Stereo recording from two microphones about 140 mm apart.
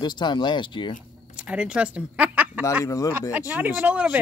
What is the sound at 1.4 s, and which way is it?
Speech, 10° right (ahead or behind).